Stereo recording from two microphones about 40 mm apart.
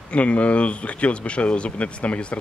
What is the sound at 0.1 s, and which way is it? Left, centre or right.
Speech, left.